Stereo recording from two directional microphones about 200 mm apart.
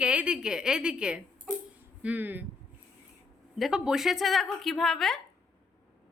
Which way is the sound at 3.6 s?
5° right (ahead or behind).